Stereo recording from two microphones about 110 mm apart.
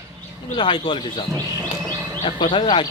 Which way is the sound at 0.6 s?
50° left (ahead or behind).